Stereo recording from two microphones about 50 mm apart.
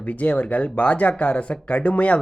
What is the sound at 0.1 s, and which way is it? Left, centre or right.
Speech, left.